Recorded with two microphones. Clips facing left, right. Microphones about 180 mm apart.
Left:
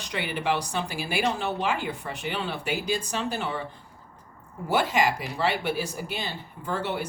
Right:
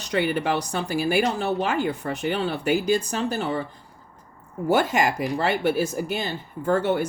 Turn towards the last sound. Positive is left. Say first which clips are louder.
# right 8 dB
turn(degrees=-50)  # may be behind; listen again after turning